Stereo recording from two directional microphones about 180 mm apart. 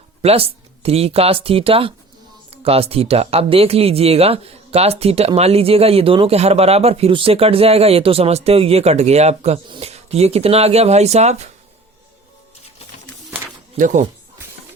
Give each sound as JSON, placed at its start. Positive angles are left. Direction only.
{"t": 0.2, "sound": "speech", "side_deg": -35}
{"t": 13.7, "sound": "speech", "side_deg": -45}